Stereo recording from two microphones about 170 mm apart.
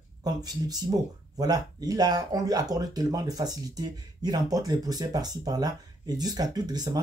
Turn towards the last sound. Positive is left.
turn(degrees=-25)  # may be behind; listen again after turning